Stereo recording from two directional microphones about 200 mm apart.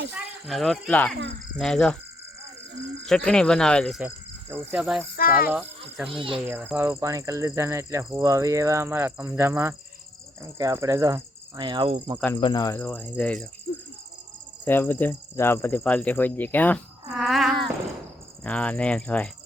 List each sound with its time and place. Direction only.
0.4 s speech: centre (ahead or behind)
3.1 s speech: 5° left (ahead or behind)
4.0 s cricket: 10° right (ahead or behind)
4.7 s speech: centre (ahead or behind)
5.1 s speech: 45° left (ahead or behind)
6.1 s speech: 25° right (ahead or behind)
6.3 s speech: 5° right (ahead or behind); by 12.2 s 20° right (ahead or behind)
12.4 s speech: 20° left (ahead or behind); by 13.5 s 5° left (ahead or behind)
14.6 s speech: 10° left (ahead or behind)